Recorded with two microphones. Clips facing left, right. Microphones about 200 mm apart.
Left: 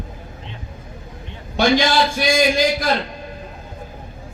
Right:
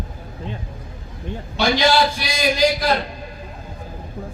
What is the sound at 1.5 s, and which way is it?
A man's voice, 50° left (ahead or behind).